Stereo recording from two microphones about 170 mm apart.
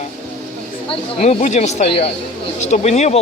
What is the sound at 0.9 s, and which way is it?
Speech, 35° left (ahead or behind).